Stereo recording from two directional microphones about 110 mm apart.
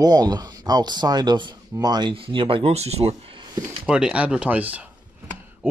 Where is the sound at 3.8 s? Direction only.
10° right (ahead or behind).